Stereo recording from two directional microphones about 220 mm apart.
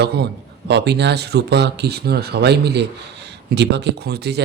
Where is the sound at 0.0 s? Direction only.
50° right (ahead or behind).